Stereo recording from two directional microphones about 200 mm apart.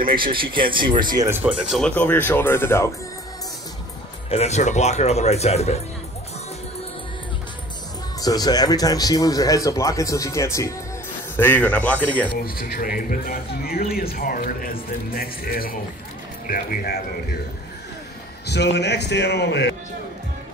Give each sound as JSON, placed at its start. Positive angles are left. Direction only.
{"t": 0.1, "sound": "speech", "side_deg": -25}
{"t": 4.3, "sound": "speech", "side_deg": 35}
{"t": 8.2, "sound": "speech", "side_deg": 20}
{"t": 12.4, "sound": "speech", "side_deg": 45}
{"t": 18.5, "sound": "a man's voice", "side_deg": 60}